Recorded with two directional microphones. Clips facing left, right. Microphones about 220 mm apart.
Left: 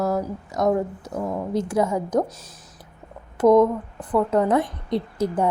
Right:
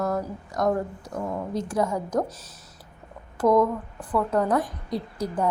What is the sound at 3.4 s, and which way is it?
A woman's voice, 20° left (ahead or behind).